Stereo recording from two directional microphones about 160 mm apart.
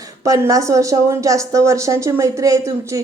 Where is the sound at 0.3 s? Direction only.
20° right (ahead or behind).